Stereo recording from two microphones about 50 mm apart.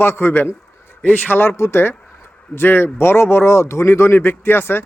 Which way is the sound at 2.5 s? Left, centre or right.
Left.